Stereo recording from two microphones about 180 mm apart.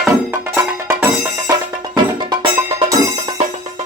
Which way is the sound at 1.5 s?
25° right (ahead or behind).